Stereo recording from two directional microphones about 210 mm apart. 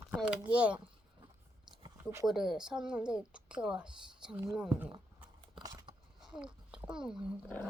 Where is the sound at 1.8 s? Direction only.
15° right (ahead or behind).